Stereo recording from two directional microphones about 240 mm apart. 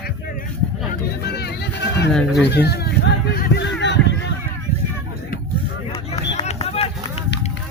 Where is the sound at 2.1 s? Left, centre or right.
Centre.